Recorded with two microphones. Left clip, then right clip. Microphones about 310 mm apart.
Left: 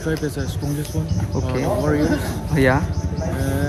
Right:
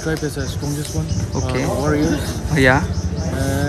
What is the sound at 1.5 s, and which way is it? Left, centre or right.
Speech, centre.